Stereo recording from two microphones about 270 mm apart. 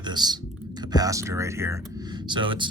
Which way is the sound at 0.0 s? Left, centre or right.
Centre.